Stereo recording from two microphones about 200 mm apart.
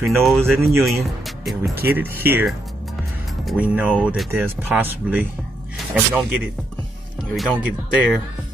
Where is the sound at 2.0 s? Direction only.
10° right (ahead or behind).